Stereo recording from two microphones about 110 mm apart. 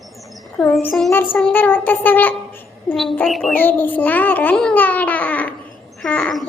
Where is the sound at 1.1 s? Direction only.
20° left (ahead or behind).